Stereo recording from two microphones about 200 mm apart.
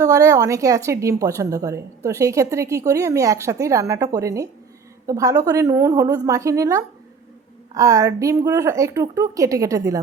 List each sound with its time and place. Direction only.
0.0 s a woman's voice: 15° right (ahead or behind)